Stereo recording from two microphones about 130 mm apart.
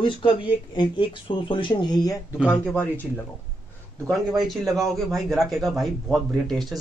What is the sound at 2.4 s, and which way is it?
Speech, 15° left (ahead or behind).